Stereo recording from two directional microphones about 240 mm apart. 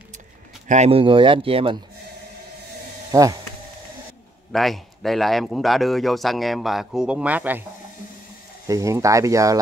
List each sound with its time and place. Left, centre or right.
0.7 s speech: right
3.1 s speech: centre
4.5 s speech: centre
8.6 s speech: centre